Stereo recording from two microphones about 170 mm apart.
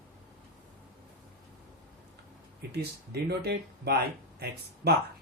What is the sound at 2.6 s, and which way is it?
Speech, 70° right (ahead or behind).